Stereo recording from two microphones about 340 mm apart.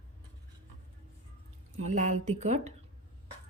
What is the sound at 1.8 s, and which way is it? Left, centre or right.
Speech, right.